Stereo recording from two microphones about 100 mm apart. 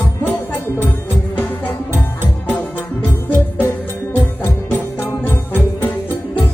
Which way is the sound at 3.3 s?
15° left (ahead or behind).